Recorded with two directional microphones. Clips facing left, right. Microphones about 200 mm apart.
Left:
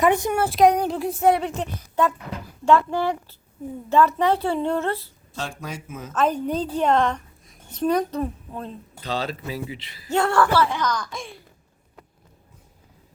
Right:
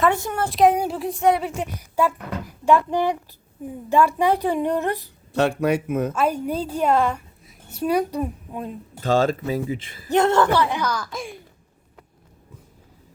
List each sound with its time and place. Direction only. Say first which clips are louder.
0.0 s a woman's voice: left 2 dB; 15° left (ahead or behind)
0.4 s a child's voice: right 1 dB; centre (ahead or behind); by 5.1 s 15° right (ahead or behind)
5.3 s speech: right 13 dB; 65° right (ahead or behind)
6.1 s a woman's voice: even; 10° right (ahead or behind)
9.0 s speech: right 9 dB; 45° right (ahead or behind)
10.1 s a woman's voice: right 2 dB; 20° right (ahead or behind); by 11.3 s 5° right (ahead or behind)